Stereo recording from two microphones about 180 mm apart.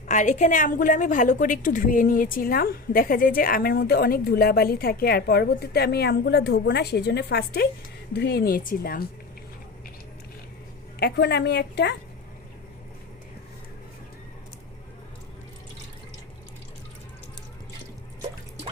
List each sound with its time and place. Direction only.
0.1 s a woman's voice: 40° left (ahead or behind)
11.0 s a woman's voice: 65° left (ahead or behind)